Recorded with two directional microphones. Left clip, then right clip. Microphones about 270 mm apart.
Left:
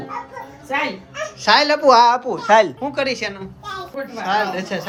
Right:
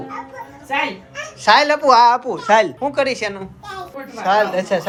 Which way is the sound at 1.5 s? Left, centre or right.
Centre.